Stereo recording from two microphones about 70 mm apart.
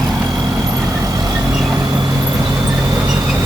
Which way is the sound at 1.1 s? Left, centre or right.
Right.